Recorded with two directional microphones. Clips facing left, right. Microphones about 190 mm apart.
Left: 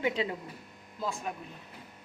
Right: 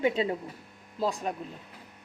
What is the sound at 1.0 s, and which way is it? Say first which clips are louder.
Speech: right 6 dB; 35° right (ahead or behind).